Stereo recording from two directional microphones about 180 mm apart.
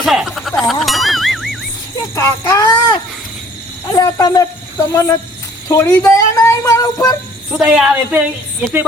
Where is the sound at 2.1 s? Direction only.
15° left (ahead or behind).